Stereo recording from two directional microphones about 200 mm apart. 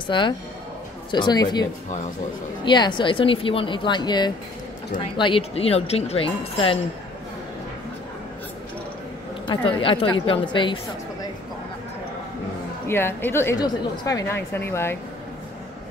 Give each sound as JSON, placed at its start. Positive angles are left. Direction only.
{"t": 0.0, "sound": "speech", "side_deg": 25}
{"t": 9.5, "sound": "speech", "side_deg": 25}
{"t": 12.8, "sound": "a woman's voice", "side_deg": 10}